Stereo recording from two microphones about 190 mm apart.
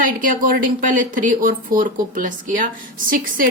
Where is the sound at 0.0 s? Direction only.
45° right (ahead or behind).